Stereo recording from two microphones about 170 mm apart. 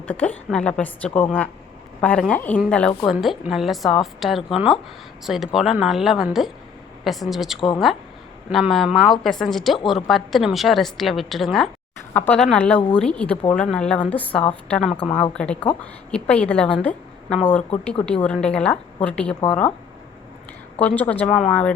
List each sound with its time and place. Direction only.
0.0 s a woman's voice: 10° left (ahead or behind)
15.0 s speech: 35° left (ahead or behind)
15.4 s a woman's voice: 5° left (ahead or behind)
20.7 s a woman's voice: 10° left (ahead or behind)